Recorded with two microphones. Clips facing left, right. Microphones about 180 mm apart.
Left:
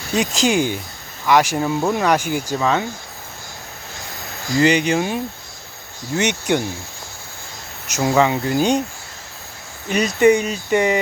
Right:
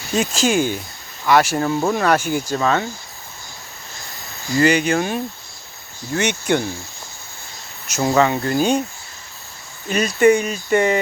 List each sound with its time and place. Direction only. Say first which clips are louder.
0.2 s speech: even; 15° left (ahead or behind)
4.5 s speech: even; 20° left (ahead or behind)
7.9 s speech: even; 15° left (ahead or behind)
9.9 s speech: even; 20° left (ahead or behind)